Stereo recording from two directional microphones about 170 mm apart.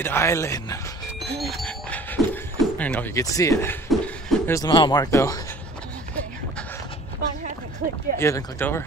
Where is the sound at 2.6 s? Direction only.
10° left (ahead or behind).